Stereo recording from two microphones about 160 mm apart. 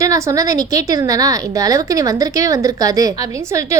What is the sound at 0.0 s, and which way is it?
A woman's voice, 20° right (ahead or behind).